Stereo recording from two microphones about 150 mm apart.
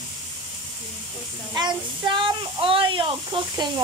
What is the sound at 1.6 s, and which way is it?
Speech, 30° right (ahead or behind).